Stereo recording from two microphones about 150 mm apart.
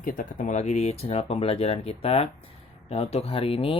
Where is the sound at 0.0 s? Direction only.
60° left (ahead or behind).